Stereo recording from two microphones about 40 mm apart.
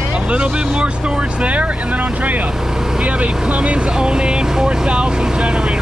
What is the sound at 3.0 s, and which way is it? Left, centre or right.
Speech, right.